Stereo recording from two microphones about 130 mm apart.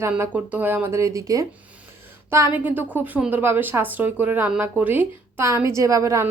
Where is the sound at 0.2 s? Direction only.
15° right (ahead or behind).